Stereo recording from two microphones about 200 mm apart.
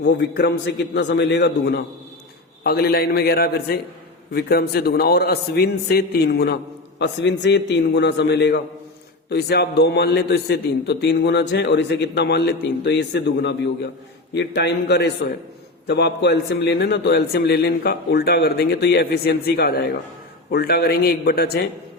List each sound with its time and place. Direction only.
0.0 s a man's voice: 60° left (ahead or behind)